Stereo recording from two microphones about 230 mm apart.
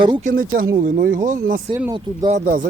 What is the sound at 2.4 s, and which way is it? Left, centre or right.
Speech, right.